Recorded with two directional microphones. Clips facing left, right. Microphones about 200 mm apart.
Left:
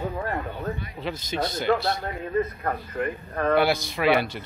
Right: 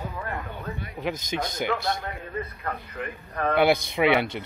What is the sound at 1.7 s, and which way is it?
Speech, 45° left (ahead or behind).